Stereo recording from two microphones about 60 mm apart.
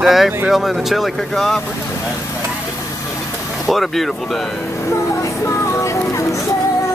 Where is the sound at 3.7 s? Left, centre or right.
Centre.